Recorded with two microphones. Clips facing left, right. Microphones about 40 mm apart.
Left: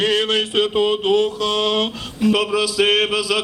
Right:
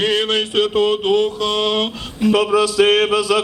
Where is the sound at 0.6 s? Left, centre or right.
Centre.